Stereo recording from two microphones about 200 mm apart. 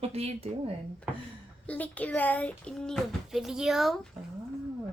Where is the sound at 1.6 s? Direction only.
5° left (ahead or behind).